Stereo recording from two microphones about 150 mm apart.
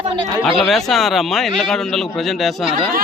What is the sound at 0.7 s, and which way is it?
A man's voice, centre (ahead or behind).